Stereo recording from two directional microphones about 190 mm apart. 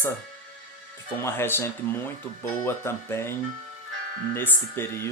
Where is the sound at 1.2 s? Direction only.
15° left (ahead or behind).